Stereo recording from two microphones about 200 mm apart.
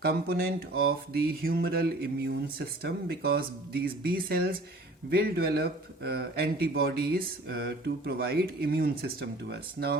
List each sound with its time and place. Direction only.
0.0 s speech: 50° right (ahead or behind)